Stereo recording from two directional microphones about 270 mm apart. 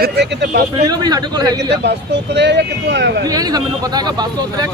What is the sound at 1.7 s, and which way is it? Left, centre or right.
Speech, right.